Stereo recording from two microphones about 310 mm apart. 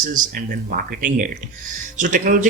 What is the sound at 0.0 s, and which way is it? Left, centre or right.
Speech, right.